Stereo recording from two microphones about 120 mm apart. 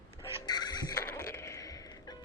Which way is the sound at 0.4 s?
35° left (ahead or behind).